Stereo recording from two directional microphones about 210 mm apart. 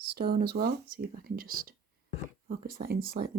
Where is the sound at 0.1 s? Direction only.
50° right (ahead or behind).